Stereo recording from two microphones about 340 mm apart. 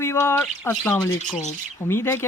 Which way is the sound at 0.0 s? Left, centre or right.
Centre.